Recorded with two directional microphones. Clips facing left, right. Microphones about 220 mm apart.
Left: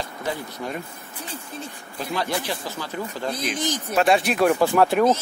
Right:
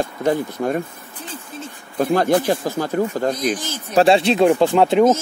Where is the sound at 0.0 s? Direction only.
50° right (ahead or behind).